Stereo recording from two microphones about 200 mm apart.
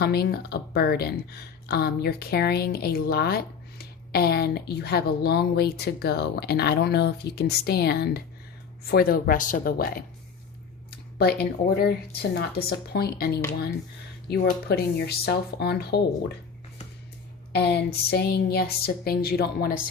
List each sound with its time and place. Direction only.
0.0 s speech: 50° left (ahead or behind)
11.2 s speech: 55° left (ahead or behind)
17.5 s speech: 55° left (ahead or behind)